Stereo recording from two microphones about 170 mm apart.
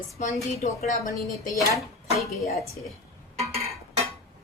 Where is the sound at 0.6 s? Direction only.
55° left (ahead or behind).